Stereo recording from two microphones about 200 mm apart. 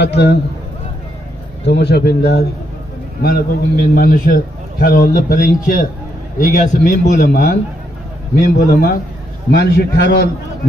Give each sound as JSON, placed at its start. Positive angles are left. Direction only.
{"t": 0.0, "sound": "a man's voice", "side_deg": 60}
{"t": 1.7, "sound": "a man's voice", "side_deg": 55}
{"t": 8.5, "sound": "a man's voice", "side_deg": 50}